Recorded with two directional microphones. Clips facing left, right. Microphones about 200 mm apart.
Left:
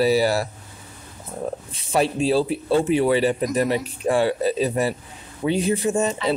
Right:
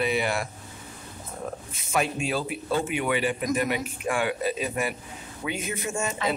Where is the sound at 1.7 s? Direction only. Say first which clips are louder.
Left 5 dB; 35° left (ahead or behind).